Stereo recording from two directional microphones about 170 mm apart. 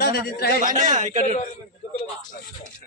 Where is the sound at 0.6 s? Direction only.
50° right (ahead or behind).